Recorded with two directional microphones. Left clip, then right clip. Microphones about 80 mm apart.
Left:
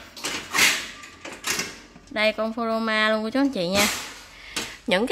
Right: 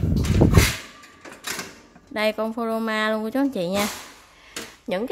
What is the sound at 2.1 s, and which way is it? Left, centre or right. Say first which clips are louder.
Speech: left 1 dB; right.